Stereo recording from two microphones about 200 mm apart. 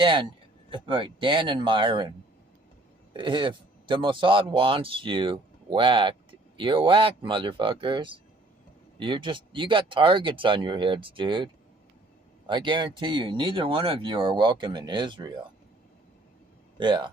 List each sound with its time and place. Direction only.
0.0 s a man's voice: 25° right (ahead or behind)
12.5 s speech: 25° right (ahead or behind)
16.7 s speech: 25° right (ahead or behind)